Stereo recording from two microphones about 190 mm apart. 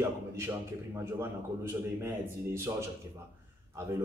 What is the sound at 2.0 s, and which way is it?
Speech, 15° right (ahead or behind).